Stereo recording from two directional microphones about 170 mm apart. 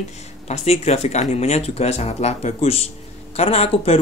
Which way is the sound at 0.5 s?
40° left (ahead or behind).